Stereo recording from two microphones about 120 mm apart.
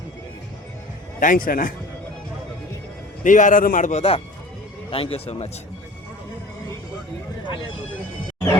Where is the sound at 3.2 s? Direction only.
90° left; by 5.5 s 55° left (ahead or behind).